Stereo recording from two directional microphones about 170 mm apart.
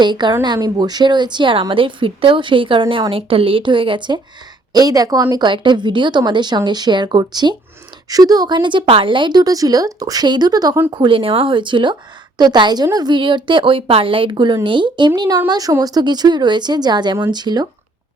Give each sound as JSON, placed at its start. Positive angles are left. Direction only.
{"t": 0.0, "sound": "speech", "side_deg": -25}